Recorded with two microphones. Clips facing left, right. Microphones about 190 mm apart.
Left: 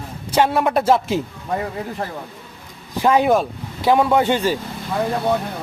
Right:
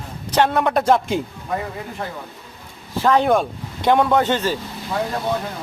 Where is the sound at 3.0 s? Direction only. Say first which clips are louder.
Left 1 dB; 10° left (ahead or behind).